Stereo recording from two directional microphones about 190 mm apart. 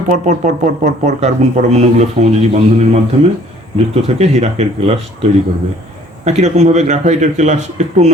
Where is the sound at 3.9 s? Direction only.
35° right (ahead or behind).